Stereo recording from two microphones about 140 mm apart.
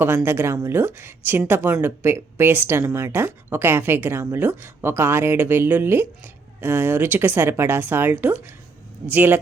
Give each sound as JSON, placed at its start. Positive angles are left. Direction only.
{"t": 0.0, "sound": "a woman's voice", "side_deg": -15}